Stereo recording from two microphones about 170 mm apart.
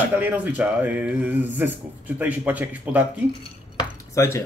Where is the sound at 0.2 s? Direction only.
10° right (ahead or behind).